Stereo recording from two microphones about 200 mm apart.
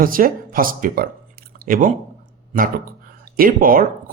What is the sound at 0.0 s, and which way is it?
Speech, 45° right (ahead or behind).